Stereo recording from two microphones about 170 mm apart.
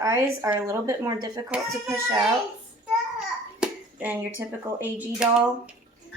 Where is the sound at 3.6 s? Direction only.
10° right (ahead or behind).